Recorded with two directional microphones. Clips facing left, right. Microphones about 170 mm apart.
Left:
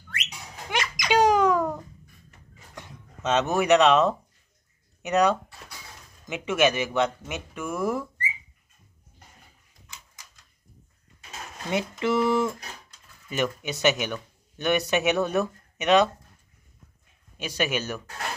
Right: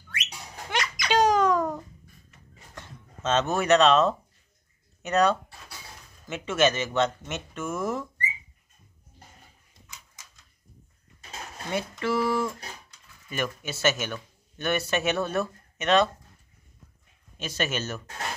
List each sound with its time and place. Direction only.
0.7 s a sound: 15° left (ahead or behind)
2.7 s speech: 15° left (ahead or behind)
11.7 s speech: 20° left (ahead or behind)
17.4 s speech: 15° left (ahead or behind)